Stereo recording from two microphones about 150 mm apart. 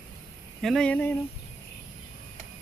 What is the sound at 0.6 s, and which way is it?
Speech, 5° left (ahead or behind).